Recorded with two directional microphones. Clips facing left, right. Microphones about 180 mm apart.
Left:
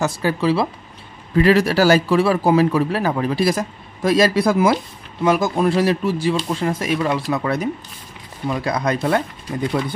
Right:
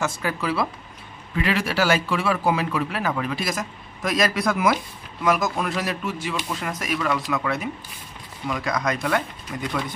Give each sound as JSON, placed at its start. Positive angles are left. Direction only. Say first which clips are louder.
{"t": 0.0, "sound": "speech", "louder": "left 7 dB", "side_deg": 35}
{"t": 1.3, "sound": "a man's voice", "louder": "left 9 dB", "side_deg": 40}